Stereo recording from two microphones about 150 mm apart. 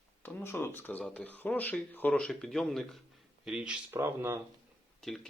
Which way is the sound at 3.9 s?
15° right (ahead or behind).